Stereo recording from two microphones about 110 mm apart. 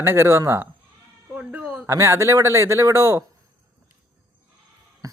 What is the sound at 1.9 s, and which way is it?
Speech, 25° right (ahead or behind).